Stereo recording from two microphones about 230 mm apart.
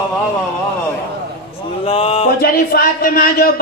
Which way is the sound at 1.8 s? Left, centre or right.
Left.